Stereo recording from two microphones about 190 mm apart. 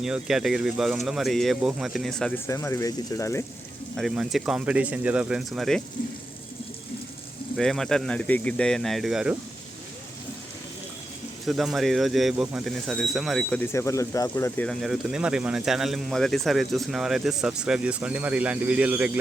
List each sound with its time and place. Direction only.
0.0 s speech: centre (ahead or behind)
2.5 s speech: 15° left (ahead or behind)
3.9 s speech: centre (ahead or behind)
7.5 s speech: centre (ahead or behind)
11.4 s speech: centre (ahead or behind)
13.7 s speech: 15° left (ahead or behind); by 19.2 s 10° right (ahead or behind)